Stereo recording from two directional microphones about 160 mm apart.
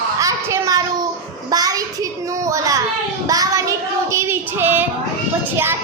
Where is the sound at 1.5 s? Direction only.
25° right (ahead or behind).